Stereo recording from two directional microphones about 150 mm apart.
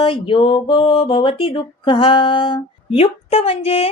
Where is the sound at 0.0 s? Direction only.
35° left (ahead or behind).